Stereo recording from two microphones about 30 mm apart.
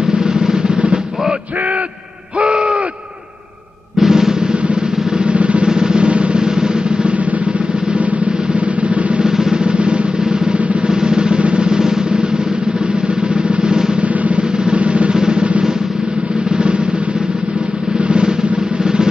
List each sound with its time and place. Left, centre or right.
0.1 s drum: right
2.4 s a sound: right
4.1 s drum roll: centre
5.2 s drum: right
5.7 s drum: right
6.0 s music: right
6.4 s drum: right
8.5 s drum: right
9.2 s drum: right
9.7 s drum: right
10.9 s drum: right
13.3 s drum roll: right
14.6 s music: right
18.0 s drum: right